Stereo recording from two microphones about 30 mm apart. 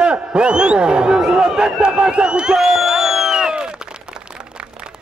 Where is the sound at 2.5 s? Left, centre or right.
Centre.